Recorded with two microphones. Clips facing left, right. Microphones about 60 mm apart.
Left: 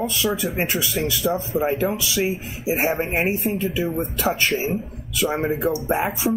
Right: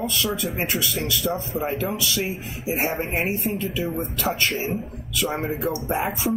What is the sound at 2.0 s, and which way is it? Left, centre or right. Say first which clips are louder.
Speech: left 3 dB; centre.